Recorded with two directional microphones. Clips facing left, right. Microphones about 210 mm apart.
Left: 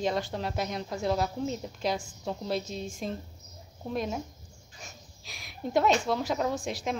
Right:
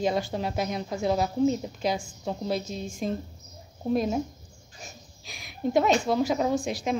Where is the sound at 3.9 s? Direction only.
35° right (ahead or behind).